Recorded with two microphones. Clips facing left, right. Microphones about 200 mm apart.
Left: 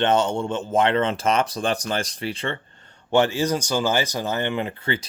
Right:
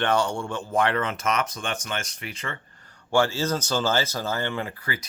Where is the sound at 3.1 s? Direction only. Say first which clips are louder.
Left 3 dB; 20° left (ahead or behind).